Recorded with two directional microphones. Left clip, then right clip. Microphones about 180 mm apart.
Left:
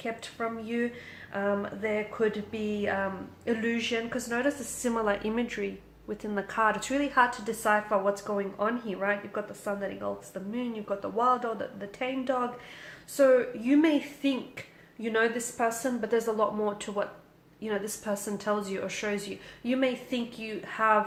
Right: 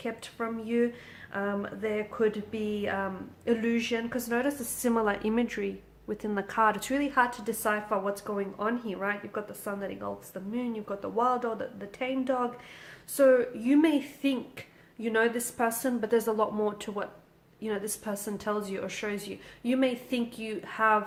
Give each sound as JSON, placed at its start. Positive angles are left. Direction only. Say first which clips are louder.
{"t": 0.0, "sound": "a woman's voice", "louder": "left 1 dB", "side_deg": -35}